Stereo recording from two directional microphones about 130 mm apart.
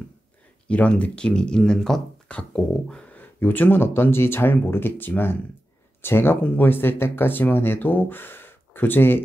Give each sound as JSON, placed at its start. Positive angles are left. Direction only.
{"t": 0.7, "sound": "speech", "side_deg": 10}